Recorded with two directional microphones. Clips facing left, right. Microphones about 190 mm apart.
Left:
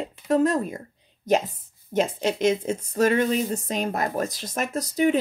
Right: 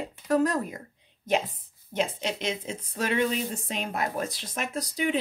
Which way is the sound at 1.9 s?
45° left (ahead or behind).